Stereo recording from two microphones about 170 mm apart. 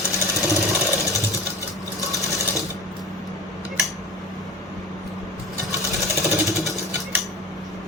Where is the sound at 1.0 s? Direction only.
Centre (ahead or behind).